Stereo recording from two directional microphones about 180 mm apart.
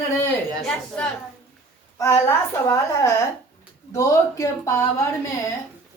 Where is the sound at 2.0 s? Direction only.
15° left (ahead or behind).